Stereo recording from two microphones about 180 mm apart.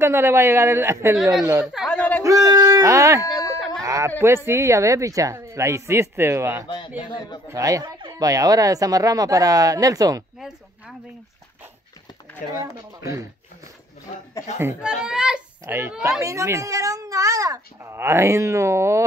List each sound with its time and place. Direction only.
0.0 s a child's voice: 15° right (ahead or behind)
1.1 s a child's voice: 5° right (ahead or behind)
1.4 s a child's voice: 15° right (ahead or behind)
1.7 s a sound: centre (ahead or behind)
2.2 s speech: 20° right (ahead or behind)
3.8 s a sound: 15° right (ahead or behind)
4.5 s a child's voice: 15° right (ahead or behind)
7.1 s a man's voice: 25° left (ahead or behind)
7.4 s speech: 20° right (ahead or behind)
13.0 s a child's voice: 15° right (ahead or behind)
14.6 s a child's voice: 10° right (ahead or behind)